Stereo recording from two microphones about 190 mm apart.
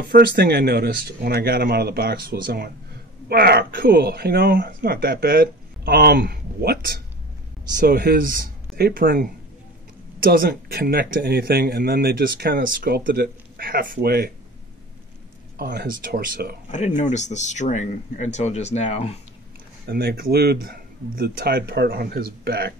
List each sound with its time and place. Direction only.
0.0 s speech: 55° right (ahead or behind)
15.5 s speech: 55° right (ahead or behind)
16.7 s speech: 40° left (ahead or behind)
19.9 s speech: 55° right (ahead or behind)